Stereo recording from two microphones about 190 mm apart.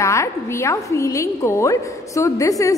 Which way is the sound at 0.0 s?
15° left (ahead or behind).